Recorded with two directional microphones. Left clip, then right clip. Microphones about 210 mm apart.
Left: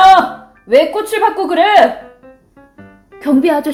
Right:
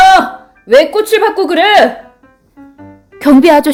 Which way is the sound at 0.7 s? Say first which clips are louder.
Right 4 dB; 40° right (ahead or behind).